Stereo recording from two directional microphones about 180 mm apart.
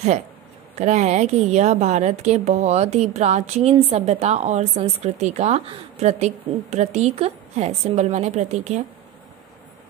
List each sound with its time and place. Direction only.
0.7 s a woman's voice: 40° right (ahead or behind)